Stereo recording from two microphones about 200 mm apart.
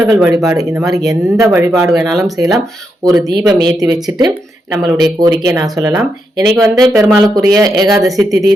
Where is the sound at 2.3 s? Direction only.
15° right (ahead or behind).